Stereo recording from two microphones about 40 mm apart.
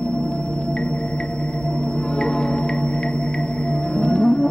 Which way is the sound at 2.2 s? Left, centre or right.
Centre.